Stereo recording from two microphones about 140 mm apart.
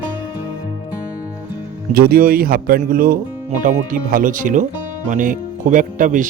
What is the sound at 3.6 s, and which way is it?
Speech, 75° right (ahead or behind).